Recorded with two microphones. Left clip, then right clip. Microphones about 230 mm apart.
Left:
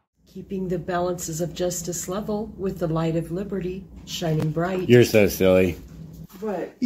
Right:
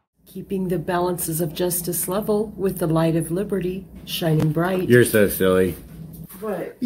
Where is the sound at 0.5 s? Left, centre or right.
Right.